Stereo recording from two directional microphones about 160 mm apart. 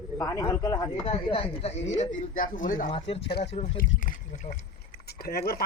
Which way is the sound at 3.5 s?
40° left (ahead or behind).